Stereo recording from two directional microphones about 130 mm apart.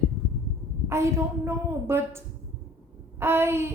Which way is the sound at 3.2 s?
20° right (ahead or behind).